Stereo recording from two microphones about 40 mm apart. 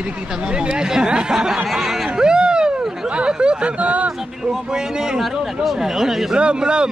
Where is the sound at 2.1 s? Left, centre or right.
Right.